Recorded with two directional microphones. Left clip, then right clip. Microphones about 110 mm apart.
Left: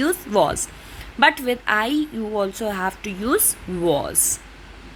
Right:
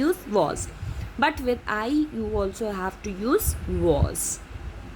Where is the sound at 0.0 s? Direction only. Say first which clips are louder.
Left 4 dB; 15° left (ahead or behind).